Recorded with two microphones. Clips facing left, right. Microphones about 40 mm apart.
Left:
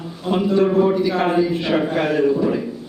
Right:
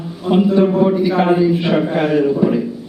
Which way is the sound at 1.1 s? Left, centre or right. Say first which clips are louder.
Right 4 dB; centre.